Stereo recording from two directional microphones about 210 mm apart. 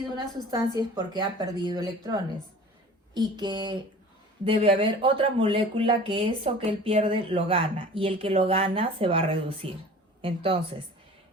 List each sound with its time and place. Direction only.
0.8 s speech: 20° right (ahead or behind)